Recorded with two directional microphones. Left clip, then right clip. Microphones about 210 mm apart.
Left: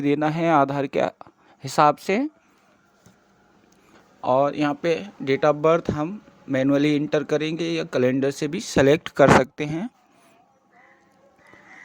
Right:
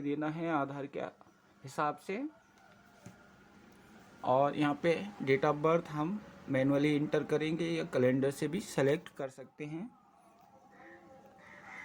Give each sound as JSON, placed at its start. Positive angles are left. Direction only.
{"t": 0.0, "sound": "speech", "side_deg": 55}
{"t": 4.2, "sound": "speech", "side_deg": 35}